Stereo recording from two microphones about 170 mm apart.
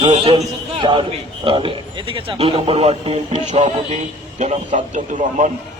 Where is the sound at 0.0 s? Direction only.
35° right (ahead or behind).